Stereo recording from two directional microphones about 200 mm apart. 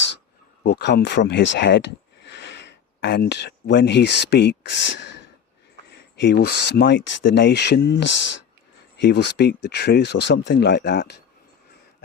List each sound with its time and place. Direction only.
0.6 s speech: 55° left (ahead or behind)